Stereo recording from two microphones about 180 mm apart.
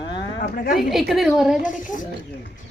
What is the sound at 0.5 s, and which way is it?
Speech, 55° left (ahead or behind).